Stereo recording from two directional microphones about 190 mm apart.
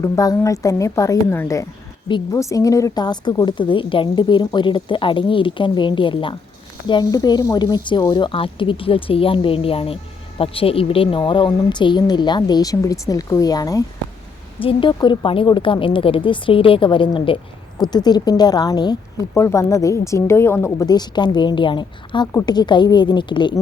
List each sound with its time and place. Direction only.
0.0 s a woman's voice: 20° left (ahead or behind)